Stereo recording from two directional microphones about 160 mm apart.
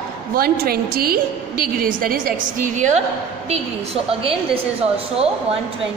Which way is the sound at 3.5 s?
40° right (ahead or behind).